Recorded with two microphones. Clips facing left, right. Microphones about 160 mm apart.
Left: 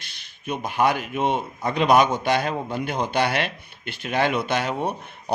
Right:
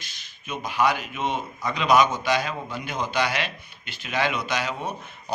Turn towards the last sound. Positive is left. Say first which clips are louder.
# left 4 dB
turn(degrees=55)  # may be behind; listen again after turning